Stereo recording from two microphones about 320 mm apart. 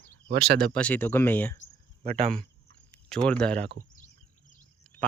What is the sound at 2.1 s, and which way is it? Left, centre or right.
Speech, centre.